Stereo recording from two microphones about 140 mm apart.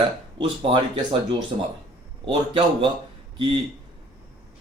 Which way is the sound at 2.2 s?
35° right (ahead or behind).